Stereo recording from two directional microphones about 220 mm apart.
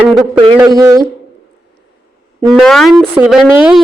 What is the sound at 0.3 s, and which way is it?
Speech, 20° right (ahead or behind).